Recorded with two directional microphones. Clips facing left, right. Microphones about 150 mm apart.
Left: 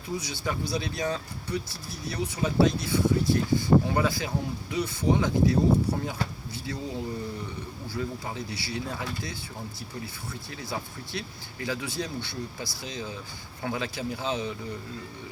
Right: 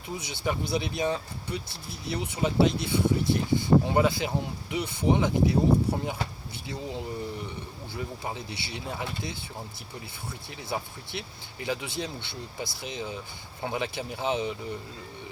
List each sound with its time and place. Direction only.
0.2 s speech: 25° right (ahead or behind)
10.6 s speech: 20° right (ahead or behind)